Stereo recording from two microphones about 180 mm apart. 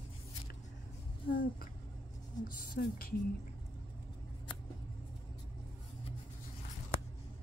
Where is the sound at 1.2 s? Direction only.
55° left (ahead or behind).